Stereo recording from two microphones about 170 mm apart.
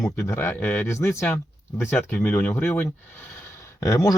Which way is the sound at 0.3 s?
15° left (ahead or behind).